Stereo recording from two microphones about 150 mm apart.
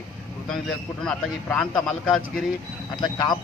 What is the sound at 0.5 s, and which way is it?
A man's voice, 5° left (ahead or behind).